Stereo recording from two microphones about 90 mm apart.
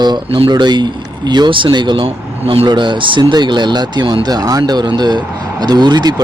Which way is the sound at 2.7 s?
60° right (ahead or behind).